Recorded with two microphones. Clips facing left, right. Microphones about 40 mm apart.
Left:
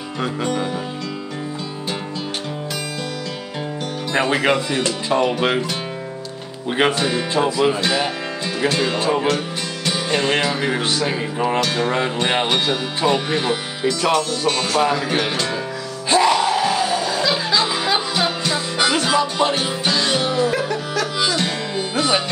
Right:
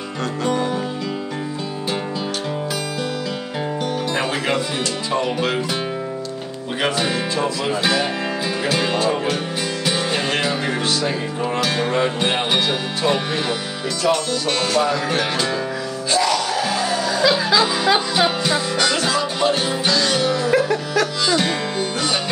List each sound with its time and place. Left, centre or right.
4.1 s music: centre
7.0 s speech: centre
7.3 s music: centre
8.6 s speech: centre
9.0 s music: centre
9.8 s music: centre
10.8 s speech: left
11.6 s speech: centre
14.9 s music: centre
16.1 s music: left
16.6 s music: centre
18.8 s music: centre
20.5 s music: centre
21.9 s music: centre